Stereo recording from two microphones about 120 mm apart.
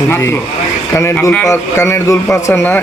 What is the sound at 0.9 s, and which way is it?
Speech, 25° left (ahead or behind).